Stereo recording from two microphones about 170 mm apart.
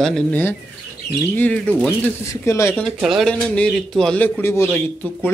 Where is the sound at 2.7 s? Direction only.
Centre (ahead or behind).